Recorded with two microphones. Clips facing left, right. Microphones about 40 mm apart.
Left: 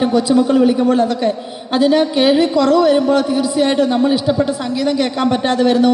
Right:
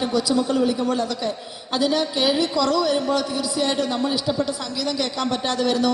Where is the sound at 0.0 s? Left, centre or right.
Left.